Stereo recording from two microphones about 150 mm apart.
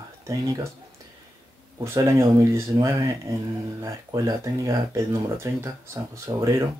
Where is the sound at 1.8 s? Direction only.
20° right (ahead or behind).